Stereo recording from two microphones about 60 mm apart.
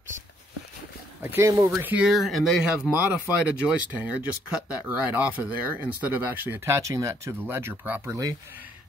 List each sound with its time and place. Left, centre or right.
1.4 s speech: right
1.8 s speech: right
2.0 s speech: centre
2.6 s speech: centre
6.6 s speech: right
7.4 s speech: right
7.8 s speech: right